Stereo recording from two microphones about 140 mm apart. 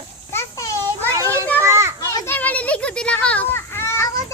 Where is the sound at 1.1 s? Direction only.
20° right (ahead or behind).